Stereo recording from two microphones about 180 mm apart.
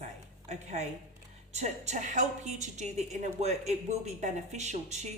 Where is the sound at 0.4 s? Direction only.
40° right (ahead or behind).